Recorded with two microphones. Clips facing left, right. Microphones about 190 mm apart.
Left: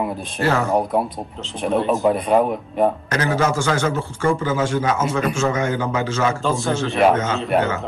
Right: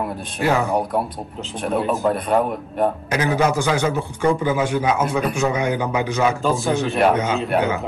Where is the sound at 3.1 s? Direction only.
15° right (ahead or behind).